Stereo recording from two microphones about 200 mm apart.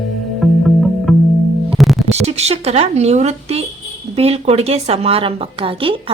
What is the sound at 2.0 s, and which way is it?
A woman's voice, 35° right (ahead or behind).